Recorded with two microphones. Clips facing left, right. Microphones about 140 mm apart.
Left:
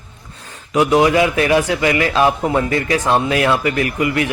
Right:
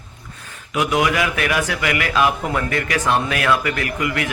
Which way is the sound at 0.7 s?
30° left (ahead or behind).